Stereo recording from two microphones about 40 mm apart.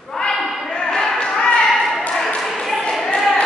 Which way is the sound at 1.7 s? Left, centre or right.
Centre.